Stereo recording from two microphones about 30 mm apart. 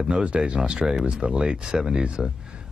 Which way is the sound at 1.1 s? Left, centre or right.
Right.